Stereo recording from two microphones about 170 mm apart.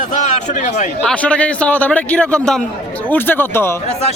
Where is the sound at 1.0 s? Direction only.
5° left (ahead or behind).